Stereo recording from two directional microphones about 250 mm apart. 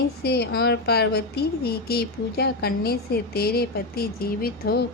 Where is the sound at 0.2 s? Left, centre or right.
Left.